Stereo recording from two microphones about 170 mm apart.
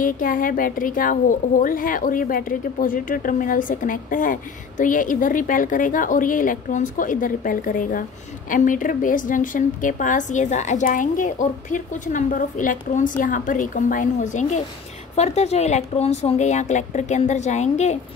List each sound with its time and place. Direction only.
0.0 s speech: 55° left (ahead or behind)